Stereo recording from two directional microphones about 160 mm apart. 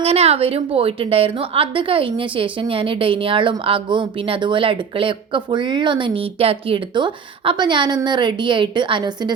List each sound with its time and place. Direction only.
0.0 s a woman's voice: 40° right (ahead or behind)